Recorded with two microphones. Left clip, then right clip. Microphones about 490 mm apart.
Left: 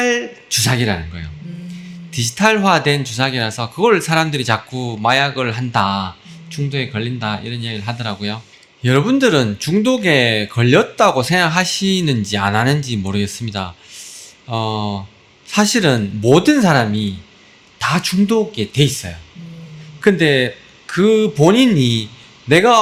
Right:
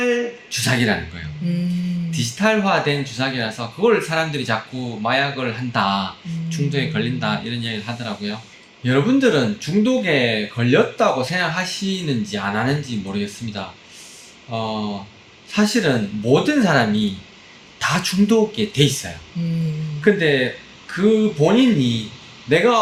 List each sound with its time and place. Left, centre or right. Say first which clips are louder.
0.0 s a sound: left 3 dB; left
2.0 s speech: left 5 dB; left
20.1 s speech: left 3 dB; left